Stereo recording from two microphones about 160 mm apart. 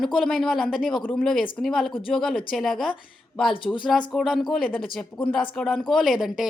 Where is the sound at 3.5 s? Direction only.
30° left (ahead or behind).